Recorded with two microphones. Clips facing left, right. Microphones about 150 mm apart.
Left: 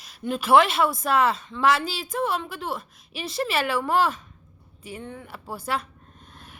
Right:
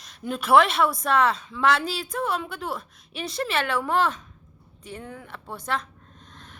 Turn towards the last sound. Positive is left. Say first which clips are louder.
# even
turn(degrees=10)  # may be behind; listen again after turning